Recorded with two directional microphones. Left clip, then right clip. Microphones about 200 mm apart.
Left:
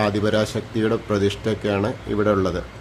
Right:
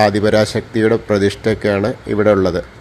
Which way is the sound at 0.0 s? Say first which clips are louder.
Right 8 dB; 25° right (ahead or behind).